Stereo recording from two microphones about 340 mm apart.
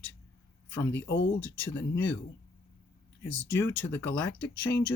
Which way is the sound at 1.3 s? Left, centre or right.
Centre.